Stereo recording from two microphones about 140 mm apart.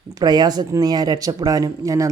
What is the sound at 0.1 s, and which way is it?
Speech, 30° right (ahead or behind).